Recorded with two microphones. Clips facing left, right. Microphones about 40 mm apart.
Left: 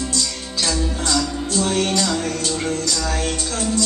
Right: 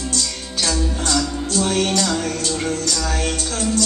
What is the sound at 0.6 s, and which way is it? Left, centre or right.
Music, centre.